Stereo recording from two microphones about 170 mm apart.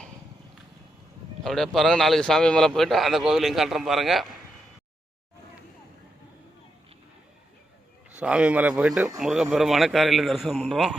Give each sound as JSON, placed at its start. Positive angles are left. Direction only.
{"t": 1.5, "sound": "a man's voice", "side_deg": 0}
{"t": 8.1, "sound": "a man's voice", "side_deg": -5}